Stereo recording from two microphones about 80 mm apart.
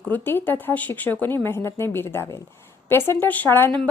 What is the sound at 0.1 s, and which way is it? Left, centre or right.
Speech, left.